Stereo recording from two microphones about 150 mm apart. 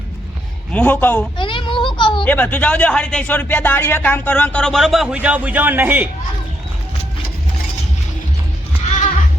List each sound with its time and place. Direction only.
0.7 s speech: 10° left (ahead or behind)
1.4 s a sound: 35° left (ahead or behind)
2.2 s speech: 10° left (ahead or behind); by 6.1 s 10° right (ahead or behind)